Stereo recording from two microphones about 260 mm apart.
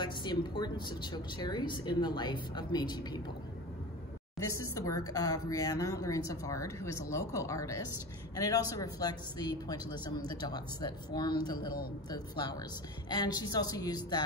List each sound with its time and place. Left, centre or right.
0.0 s a woman's voice: centre
4.7 s a woman's voice: centre